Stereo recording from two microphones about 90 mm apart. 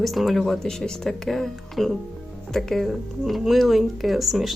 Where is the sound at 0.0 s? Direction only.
Centre (ahead or behind).